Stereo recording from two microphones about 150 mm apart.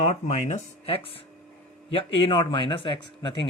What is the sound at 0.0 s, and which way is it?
A man's voice, 50° left (ahead or behind).